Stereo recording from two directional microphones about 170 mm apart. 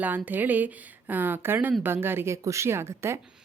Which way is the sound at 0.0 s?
10° right (ahead or behind).